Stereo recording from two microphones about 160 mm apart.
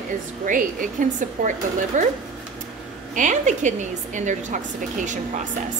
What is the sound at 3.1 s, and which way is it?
A woman's voice, 50° right (ahead or behind).